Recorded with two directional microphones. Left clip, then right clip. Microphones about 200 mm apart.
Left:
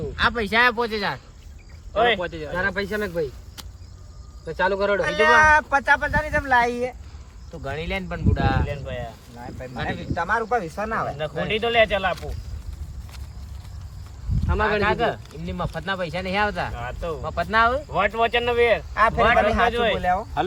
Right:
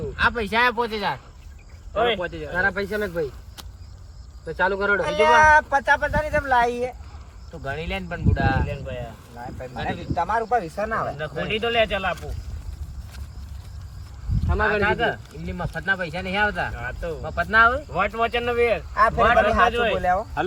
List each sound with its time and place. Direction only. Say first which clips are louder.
0.2 s speech: left 1 dB; centre (ahead or behind)
1.9 s speech: left 2 dB; 45° left (ahead or behind)
2.3 s speech: right 2 dB; centre (ahead or behind)
14.4 s speech: even; centre (ahead or behind)
17.9 s speech: left 2 dB; 50° left (ahead or behind)
18.9 s speech: right 2 dB; centre (ahead or behind)